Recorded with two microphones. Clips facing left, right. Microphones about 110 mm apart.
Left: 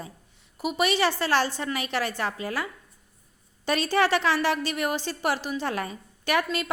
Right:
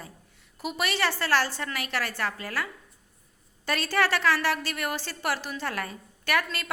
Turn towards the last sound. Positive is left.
turn(degrees=20)  # may be behind; listen again after turning